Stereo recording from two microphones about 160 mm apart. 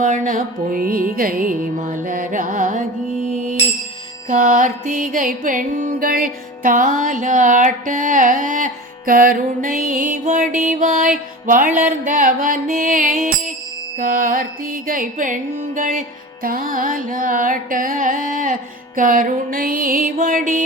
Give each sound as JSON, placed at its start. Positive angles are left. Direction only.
{"t": 0.0, "sound": "music", "side_deg": -55}